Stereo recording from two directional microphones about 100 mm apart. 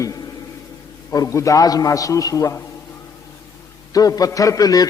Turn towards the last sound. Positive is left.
turn(degrees=40)  # may be behind; listen again after turning